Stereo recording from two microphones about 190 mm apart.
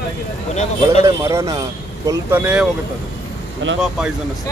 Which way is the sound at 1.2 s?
15° right (ahead or behind).